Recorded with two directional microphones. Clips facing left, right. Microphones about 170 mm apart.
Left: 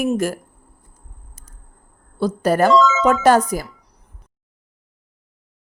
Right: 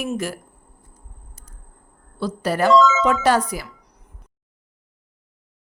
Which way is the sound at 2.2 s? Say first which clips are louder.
Left 5 dB; 45° left (ahead or behind).